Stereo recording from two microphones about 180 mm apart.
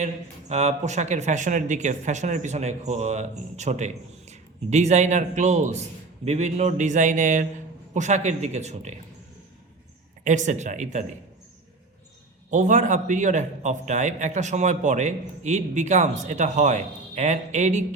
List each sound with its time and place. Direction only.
0.0 s speech: 40° right (ahead or behind)
10.2 s speech: 45° right (ahead or behind)
12.5 s speech: 40° right (ahead or behind)